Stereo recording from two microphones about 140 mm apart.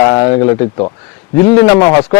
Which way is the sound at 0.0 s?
30° left (ahead or behind).